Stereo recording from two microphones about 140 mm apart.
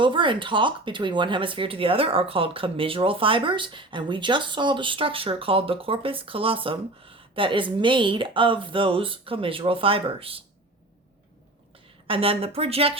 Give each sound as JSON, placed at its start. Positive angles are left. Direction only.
{"t": 0.0, "sound": "speech", "side_deg": -35}
{"t": 12.0, "sound": "speech", "side_deg": -40}